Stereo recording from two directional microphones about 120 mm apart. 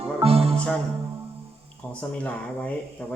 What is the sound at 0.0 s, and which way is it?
Music, 55° right (ahead or behind).